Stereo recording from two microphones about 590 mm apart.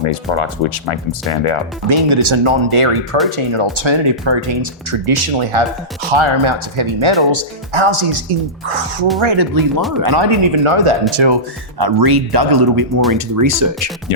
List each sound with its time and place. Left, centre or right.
0.0 s speech: left
1.9 s speech: right
9.2 s speech: right
11.8 s speech: right